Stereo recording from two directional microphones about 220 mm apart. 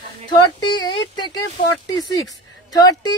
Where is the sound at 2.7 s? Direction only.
15° left (ahead or behind).